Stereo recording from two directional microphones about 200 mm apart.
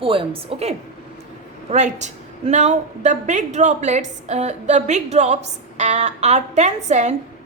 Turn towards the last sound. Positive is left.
turn(degrees=-35)  # may be behind; listen again after turning